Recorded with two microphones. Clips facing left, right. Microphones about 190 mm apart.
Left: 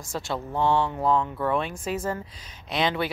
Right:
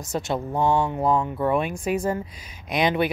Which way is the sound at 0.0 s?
20° right (ahead or behind).